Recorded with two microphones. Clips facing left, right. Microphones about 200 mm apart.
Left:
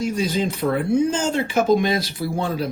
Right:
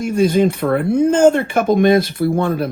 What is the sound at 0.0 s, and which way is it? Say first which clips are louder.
Speech: right 8 dB; 55° right (ahead or behind).